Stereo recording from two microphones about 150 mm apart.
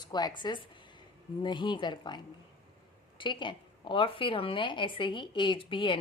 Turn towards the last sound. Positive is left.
turn(degrees=35)  # may be behind; listen again after turning